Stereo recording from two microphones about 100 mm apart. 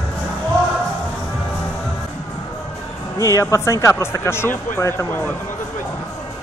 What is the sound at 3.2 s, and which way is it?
Speech, 30° left (ahead or behind).